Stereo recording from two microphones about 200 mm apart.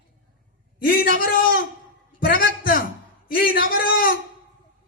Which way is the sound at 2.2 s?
45° left (ahead or behind).